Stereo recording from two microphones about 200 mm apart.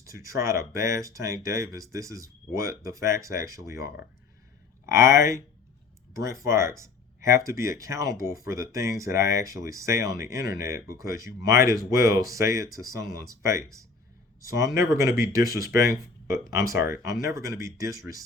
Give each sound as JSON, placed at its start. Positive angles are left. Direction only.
{"t": 0.0, "sound": "speech", "side_deg": -15}
{"t": 4.9, "sound": "speech", "side_deg": -15}